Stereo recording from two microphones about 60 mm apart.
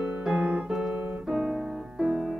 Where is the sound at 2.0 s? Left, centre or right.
Centre.